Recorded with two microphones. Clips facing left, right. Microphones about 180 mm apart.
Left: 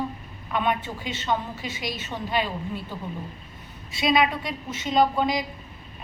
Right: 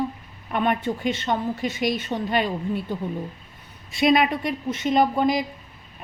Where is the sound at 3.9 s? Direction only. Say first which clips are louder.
Right 3 dB; 50° right (ahead or behind).